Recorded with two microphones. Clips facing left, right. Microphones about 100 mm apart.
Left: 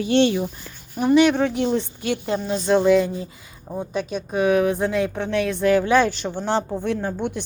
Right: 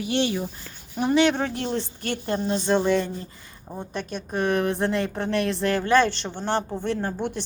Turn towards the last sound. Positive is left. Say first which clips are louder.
# left 2 dB
turn(degrees=0)  # may be behind; listen again after turning